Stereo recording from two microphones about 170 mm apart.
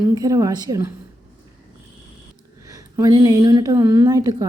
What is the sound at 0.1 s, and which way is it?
Speech, 20° right (ahead or behind).